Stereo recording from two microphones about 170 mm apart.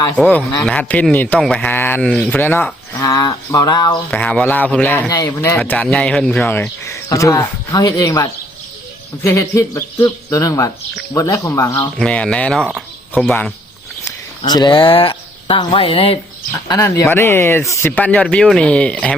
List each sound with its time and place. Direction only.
0.2 s speech: 10° left (ahead or behind)
4.1 s speech: 5° left (ahead or behind)
11.9 s speech: 5° left (ahead or behind)
12.7 s a sound: centre (ahead or behind)
14.0 s speech: 25° left (ahead or behind)
16.5 s speech: 15° left (ahead or behind)